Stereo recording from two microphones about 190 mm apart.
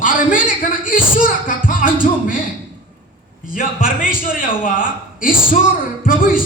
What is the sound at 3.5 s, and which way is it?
Speech, 45° left (ahead or behind).